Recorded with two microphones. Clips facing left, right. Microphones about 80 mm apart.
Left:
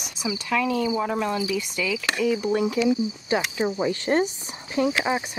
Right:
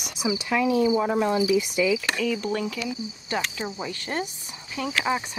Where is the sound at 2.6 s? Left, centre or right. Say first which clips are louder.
Left 9 dB; left.